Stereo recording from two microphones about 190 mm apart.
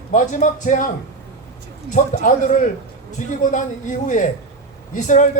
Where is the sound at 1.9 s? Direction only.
40° left (ahead or behind).